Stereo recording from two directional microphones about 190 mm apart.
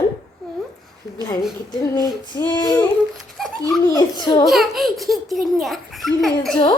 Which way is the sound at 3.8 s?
20° left (ahead or behind).